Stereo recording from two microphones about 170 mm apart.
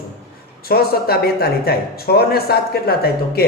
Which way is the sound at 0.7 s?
65° left (ahead or behind).